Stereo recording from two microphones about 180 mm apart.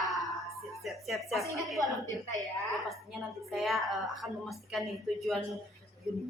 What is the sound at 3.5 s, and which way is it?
Speech, centre (ahead or behind).